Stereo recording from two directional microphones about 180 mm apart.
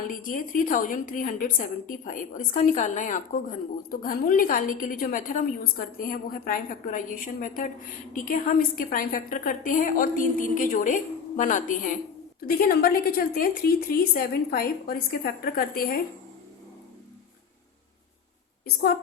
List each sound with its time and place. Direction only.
0.1 s a woman's voice: 50° left (ahead or behind)
12.4 s a woman's voice: 55° left (ahead or behind)